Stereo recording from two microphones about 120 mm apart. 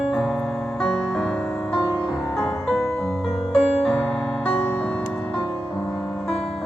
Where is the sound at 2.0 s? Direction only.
5° left (ahead or behind).